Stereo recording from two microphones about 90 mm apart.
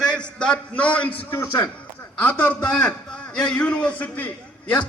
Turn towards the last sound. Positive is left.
turn(degrees=15)  # may be behind; listen again after turning